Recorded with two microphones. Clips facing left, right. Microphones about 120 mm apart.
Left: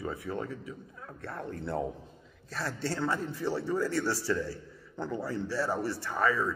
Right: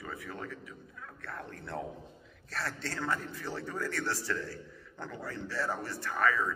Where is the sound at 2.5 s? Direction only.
5° left (ahead or behind).